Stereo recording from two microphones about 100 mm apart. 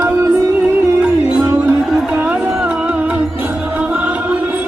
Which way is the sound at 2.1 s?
10° right (ahead or behind).